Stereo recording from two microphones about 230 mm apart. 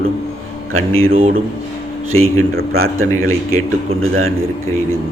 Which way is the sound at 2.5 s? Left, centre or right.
Right.